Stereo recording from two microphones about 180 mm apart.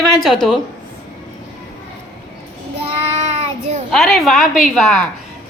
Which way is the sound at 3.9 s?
Centre (ahead or behind).